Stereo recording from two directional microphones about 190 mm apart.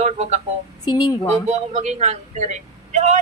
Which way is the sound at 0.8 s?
20° left (ahead or behind).